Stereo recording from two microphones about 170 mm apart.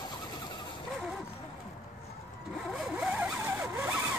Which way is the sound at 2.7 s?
5° right (ahead or behind).